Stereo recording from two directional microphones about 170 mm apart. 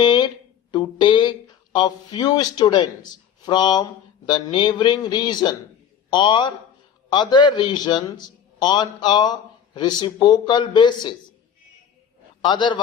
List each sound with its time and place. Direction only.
0.0 s a sound: 25° left (ahead or behind)
0.7 s a man's voice: 25° left (ahead or behind)
12.4 s a man's voice: 25° left (ahead or behind)